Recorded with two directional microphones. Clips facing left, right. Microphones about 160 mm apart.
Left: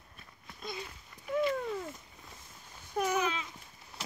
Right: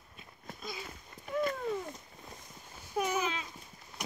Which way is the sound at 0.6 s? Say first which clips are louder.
Left 2 dB; centre (ahead or behind).